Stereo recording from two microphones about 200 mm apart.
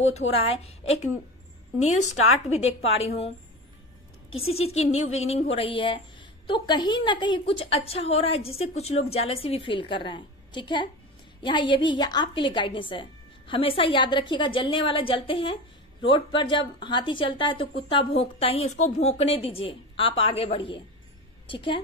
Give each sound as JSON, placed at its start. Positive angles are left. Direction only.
{"t": 0.1, "sound": "a woman's voice", "side_deg": 30}
{"t": 4.6, "sound": "a woman's voice", "side_deg": 30}